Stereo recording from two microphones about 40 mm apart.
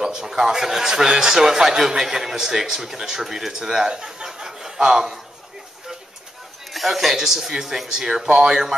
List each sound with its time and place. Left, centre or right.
0.0 s a man's voice: centre
6.7 s a man's voice: centre